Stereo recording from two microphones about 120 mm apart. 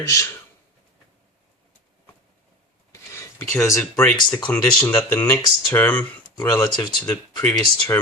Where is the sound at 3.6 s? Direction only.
25° left (ahead or behind).